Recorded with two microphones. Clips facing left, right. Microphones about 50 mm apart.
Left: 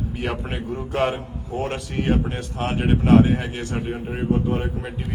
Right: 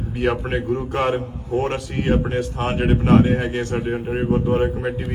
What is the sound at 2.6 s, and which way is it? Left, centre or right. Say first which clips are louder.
Speech: left 3 dB; right.